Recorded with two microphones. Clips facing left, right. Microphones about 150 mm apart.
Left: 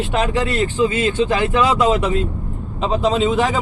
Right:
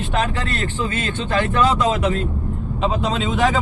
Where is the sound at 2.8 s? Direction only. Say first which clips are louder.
Left 4 dB; centre (ahead or behind).